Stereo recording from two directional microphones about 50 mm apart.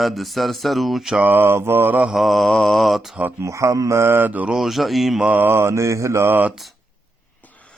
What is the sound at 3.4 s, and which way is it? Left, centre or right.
Mantra, right.